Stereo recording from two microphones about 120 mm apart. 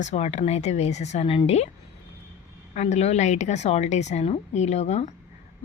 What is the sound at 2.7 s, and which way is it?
Speech, 70° left (ahead or behind).